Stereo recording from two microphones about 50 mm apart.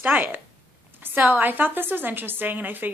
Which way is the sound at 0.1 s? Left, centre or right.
Right.